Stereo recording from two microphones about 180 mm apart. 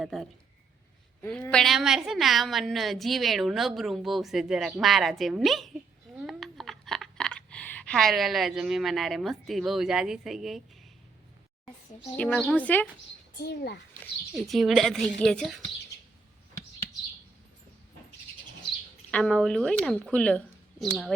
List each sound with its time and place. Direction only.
0.0 s a woman's voice: centre (ahead or behind)
12.1 s a woman's voice: 5° left (ahead or behind)
13.4 s a child's voice: 60° left (ahead or behind)
14.0 s a woman's voice: centre (ahead or behind)
19.1 s a woman's voice: 5° left (ahead or behind)